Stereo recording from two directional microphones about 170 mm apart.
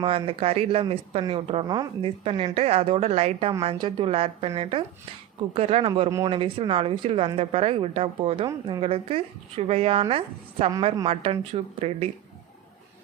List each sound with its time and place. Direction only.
0.0 s speech: 35° right (ahead or behind)
1.6 s speech: 25° right (ahead or behind)
6.1 s speech: 20° right (ahead or behind)
6.3 s speech: 35° right (ahead or behind)